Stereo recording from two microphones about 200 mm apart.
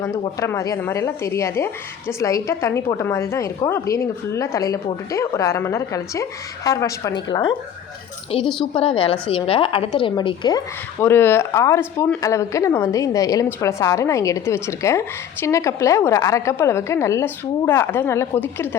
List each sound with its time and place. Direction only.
0.0 s speech: 15° left (ahead or behind)
8.7 s a woman's voice: 25° left (ahead or behind)